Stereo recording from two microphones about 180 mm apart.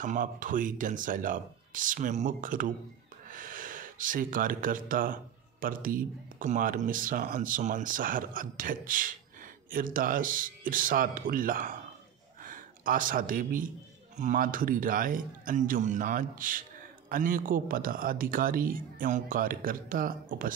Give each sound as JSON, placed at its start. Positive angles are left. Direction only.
{"t": 0.0, "sound": "speech", "side_deg": -45}